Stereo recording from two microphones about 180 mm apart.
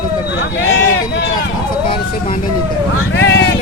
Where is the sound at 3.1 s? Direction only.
75° left (ahead or behind).